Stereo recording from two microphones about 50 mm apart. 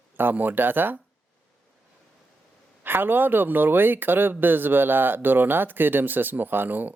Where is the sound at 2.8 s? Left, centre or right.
Right.